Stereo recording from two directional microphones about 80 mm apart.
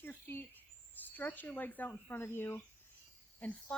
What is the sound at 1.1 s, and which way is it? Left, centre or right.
Speech, left.